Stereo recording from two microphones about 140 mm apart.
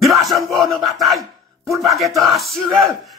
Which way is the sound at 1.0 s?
Centre (ahead or behind).